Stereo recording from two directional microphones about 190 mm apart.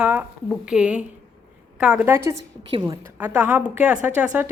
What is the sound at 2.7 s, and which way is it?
Speech, 25° right (ahead or behind).